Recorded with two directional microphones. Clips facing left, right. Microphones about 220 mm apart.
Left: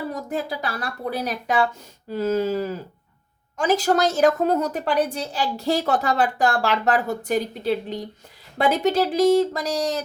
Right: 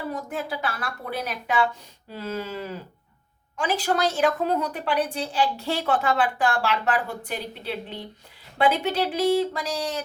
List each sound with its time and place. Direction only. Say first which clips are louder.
0.1 s a woman's voice: left 3 dB; 40° left (ahead or behind)